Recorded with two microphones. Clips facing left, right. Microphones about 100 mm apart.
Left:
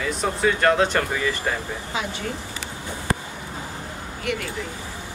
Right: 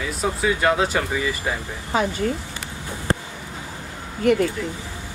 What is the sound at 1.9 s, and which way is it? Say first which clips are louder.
Speech: right 8 dB; 45° right (ahead or behind).